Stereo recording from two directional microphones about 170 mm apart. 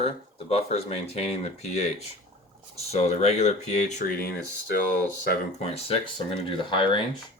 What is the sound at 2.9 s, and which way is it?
Speech, 40° left (ahead or behind).